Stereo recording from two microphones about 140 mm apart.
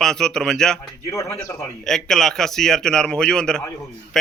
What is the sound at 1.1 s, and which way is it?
Speech, 25° left (ahead or behind).